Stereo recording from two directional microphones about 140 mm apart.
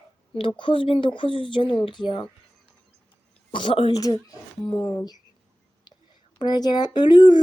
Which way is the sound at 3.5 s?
35° left (ahead or behind).